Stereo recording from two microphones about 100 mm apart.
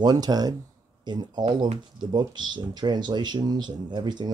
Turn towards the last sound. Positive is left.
turn(degrees=-45)  # may be behind; listen again after turning